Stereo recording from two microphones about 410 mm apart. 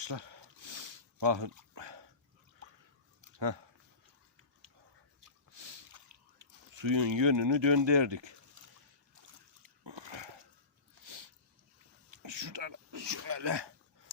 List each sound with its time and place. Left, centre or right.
0.0 s snort: right
1.7 s dog: right
3.3 s speech: right
6.4 s speech: right
9.8 s dog: right
12.1 s a sound: right